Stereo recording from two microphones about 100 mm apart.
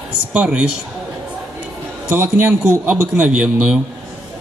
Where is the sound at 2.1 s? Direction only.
25° right (ahead or behind).